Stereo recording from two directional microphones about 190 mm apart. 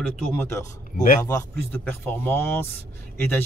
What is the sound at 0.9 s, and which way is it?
Speech, 45° left (ahead or behind).